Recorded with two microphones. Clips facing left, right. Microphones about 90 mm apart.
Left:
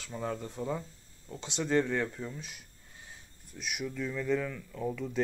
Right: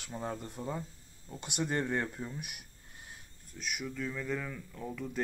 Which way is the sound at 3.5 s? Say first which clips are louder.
Left 2 dB; centre (ahead or behind).